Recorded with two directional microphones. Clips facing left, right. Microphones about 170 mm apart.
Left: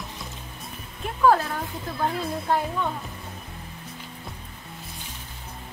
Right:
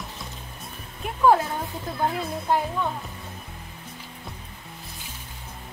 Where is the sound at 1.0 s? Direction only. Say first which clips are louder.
Right 1 dB; 15° right (ahead or behind).